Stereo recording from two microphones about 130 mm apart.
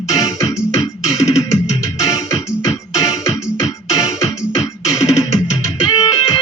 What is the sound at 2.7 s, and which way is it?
Music, 25° left (ahead or behind).